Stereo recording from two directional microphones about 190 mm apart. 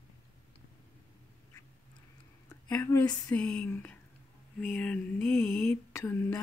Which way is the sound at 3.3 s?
5° left (ahead or behind).